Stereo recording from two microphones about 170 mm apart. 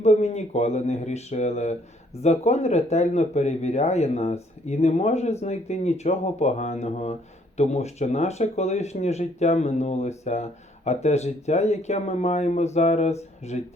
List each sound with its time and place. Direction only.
0.0 s speech: 40° left (ahead or behind)